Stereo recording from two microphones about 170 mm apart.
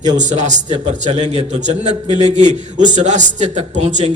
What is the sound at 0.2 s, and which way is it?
A man's voice, 45° right (ahead or behind).